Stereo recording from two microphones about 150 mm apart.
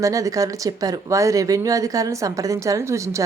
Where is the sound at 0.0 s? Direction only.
20° right (ahead or behind).